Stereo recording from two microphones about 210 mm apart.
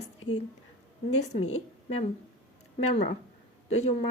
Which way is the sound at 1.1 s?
30° left (ahead or behind).